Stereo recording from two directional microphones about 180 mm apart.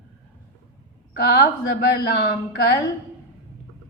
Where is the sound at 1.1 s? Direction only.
55° left (ahead or behind).